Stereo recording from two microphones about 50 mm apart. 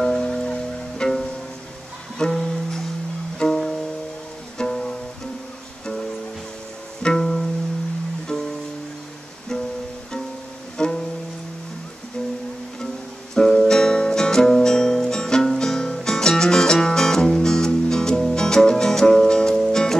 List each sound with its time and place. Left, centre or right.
0.0 s music: centre
7.0 s music: centre
10.8 s music: centre
13.3 s music: centre